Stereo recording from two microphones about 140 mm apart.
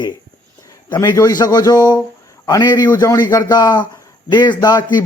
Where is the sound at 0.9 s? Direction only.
20° left (ahead or behind).